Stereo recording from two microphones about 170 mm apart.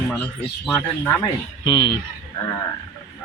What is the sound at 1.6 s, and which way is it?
Speech, 25° left (ahead or behind).